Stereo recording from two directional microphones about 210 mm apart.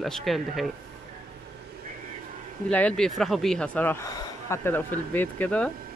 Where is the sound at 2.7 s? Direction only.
5° left (ahead or behind).